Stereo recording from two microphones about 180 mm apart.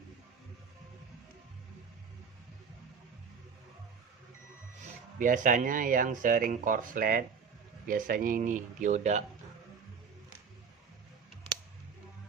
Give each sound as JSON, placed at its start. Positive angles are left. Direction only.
{"t": 5.2, "sound": "speech", "side_deg": -45}